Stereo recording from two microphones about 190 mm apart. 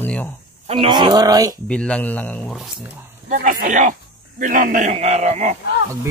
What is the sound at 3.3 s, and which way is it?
A man's voice, 45° right (ahead or behind).